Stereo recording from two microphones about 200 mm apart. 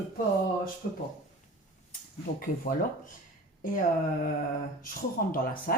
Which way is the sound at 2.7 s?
50° left (ahead or behind).